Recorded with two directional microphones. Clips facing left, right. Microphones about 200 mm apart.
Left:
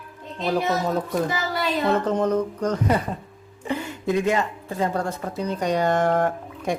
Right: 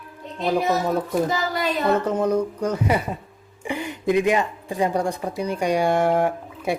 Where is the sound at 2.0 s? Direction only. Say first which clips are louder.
Right 1 dB; 10° right (ahead or behind).